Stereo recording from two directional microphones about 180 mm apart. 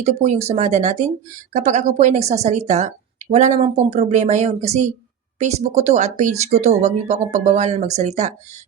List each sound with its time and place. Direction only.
0.0 s speech: 35° right (ahead or behind)